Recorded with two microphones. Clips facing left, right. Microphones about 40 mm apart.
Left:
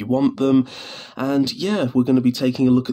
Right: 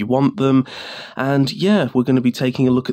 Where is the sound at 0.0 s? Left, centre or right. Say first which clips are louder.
Right 2 dB; right.